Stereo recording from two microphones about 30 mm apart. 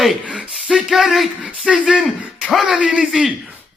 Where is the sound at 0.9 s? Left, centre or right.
Centre.